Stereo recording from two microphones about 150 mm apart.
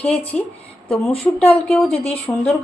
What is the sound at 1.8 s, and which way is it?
Speech, 45° left (ahead or behind).